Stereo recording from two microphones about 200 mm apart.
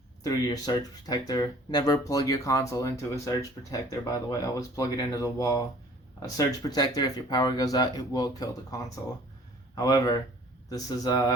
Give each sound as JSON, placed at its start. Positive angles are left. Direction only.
{"t": 0.2, "sound": "speech", "side_deg": 20}